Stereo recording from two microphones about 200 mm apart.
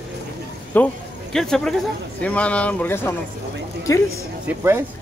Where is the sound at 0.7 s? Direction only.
10° left (ahead or behind).